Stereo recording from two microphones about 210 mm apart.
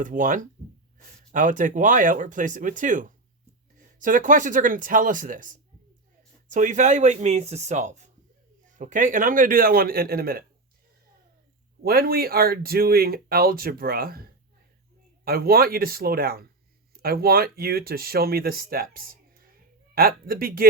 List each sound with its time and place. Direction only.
0.0 s speech: 40° right (ahead or behind)
11.8 s speech: 45° right (ahead or behind)